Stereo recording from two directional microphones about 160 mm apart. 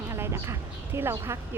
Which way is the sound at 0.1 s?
15° right (ahead or behind).